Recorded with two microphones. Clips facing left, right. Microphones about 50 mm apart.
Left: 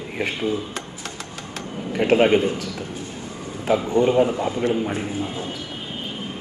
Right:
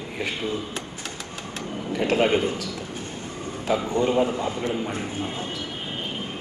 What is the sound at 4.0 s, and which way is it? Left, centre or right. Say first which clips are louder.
Speech: left 5 dB; left.